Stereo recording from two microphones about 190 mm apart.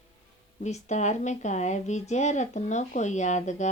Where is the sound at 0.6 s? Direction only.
40° left (ahead or behind).